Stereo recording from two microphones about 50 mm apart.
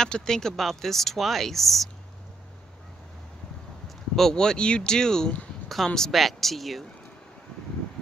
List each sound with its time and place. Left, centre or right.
0.0 s speech: centre
4.1 s speech: centre